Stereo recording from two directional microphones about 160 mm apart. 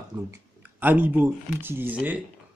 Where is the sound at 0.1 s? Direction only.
20° right (ahead or behind).